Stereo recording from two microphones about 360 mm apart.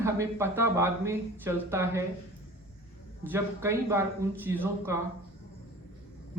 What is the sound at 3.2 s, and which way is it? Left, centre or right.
Speech, centre.